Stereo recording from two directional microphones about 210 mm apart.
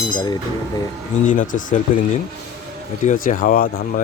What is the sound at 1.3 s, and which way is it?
Speech, 40° left (ahead or behind).